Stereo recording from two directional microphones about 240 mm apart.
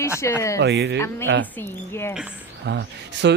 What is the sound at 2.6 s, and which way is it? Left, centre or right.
Speech, right.